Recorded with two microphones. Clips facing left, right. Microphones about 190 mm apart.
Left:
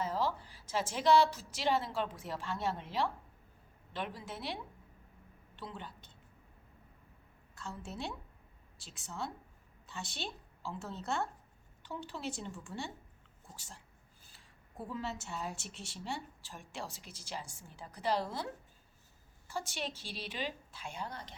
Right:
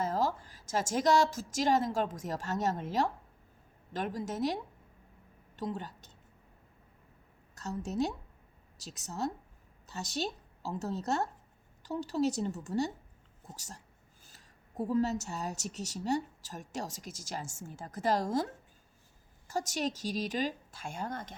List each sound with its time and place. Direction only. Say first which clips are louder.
0.0 s a woman's voice: right 3 dB; 45° right (ahead or behind)
7.5 s a woman's voice: right 9 dB; 40° right (ahead or behind)
19.5 s speech: right 7 dB; 40° right (ahead or behind)